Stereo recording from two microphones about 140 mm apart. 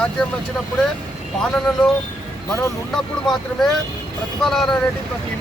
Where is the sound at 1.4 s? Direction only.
5° left (ahead or behind).